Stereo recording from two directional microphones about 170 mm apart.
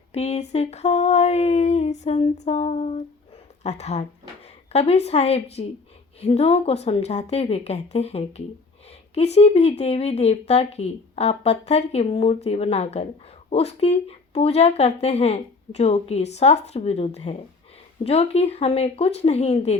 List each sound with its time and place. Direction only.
0.1 s a sound: 40° left (ahead or behind)
0.5 s female singing: 40° left (ahead or behind)
3.6 s speech: 40° left (ahead or behind)